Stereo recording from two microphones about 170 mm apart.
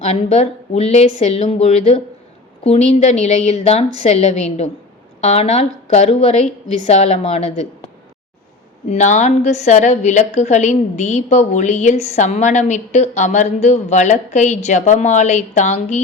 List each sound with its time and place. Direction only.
0.0 s a woman's voice: 40° left (ahead or behind)
8.9 s a woman's voice: 45° left (ahead or behind)